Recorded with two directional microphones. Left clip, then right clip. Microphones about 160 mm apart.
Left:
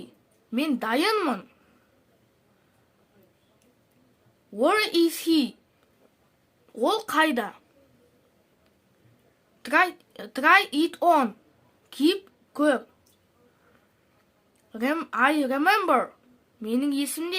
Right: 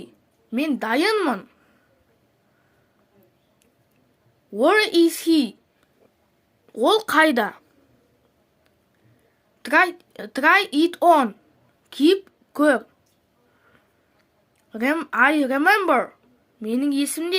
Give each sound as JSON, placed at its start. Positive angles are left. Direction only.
{"t": 0.7, "sound": "speech", "side_deg": -20}
{"t": 4.5, "sound": "speech", "side_deg": -25}
{"t": 6.7, "sound": "speech", "side_deg": -30}
{"t": 9.6, "sound": "speech", "side_deg": -25}
{"t": 11.9, "sound": "a sound", "side_deg": -25}
{"t": 14.7, "sound": "speech", "side_deg": -25}